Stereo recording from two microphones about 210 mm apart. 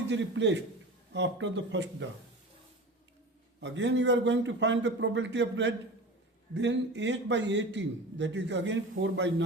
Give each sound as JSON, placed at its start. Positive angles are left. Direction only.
{"t": 0.1, "sound": "a man's voice", "side_deg": -60}
{"t": 3.6, "sound": "a man's voice", "side_deg": -55}